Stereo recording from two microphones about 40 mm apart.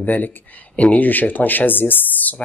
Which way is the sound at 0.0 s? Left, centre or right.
Left.